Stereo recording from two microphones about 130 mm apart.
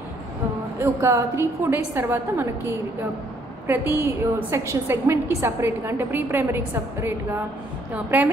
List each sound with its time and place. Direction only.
1.0 s a woman's voice: 20° right (ahead or behind)